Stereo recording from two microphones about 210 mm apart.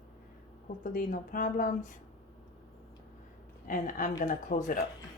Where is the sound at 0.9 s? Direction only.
40° left (ahead or behind).